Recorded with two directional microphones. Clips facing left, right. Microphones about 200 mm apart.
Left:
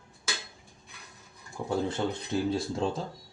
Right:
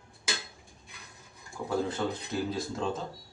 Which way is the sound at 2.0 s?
25° left (ahead or behind).